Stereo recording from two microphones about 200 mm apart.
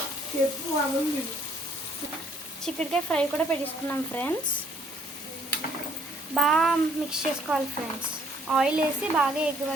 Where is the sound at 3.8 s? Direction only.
10° left (ahead or behind).